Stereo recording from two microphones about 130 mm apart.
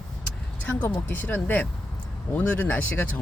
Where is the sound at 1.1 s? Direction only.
15° left (ahead or behind).